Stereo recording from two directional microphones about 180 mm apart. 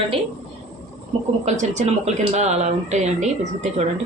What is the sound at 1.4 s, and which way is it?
Speech, 40° right (ahead or behind).